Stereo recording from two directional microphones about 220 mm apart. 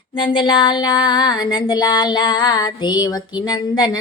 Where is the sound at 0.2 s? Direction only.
20° left (ahead or behind).